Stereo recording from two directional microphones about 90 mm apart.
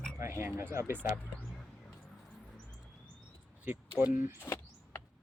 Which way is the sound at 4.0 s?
25° right (ahead or behind).